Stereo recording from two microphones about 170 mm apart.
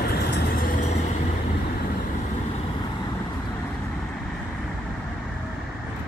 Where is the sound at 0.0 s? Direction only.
75° left (ahead or behind); by 0.8 s 55° left (ahead or behind).